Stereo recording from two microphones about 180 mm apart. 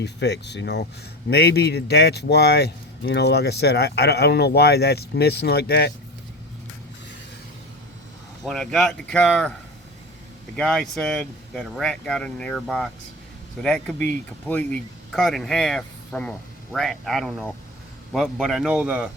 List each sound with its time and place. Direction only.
0.0 s speech: 70° left (ahead or behind)
8.4 s speech: centre (ahead or behind)
10.6 s speech: 5° left (ahead or behind)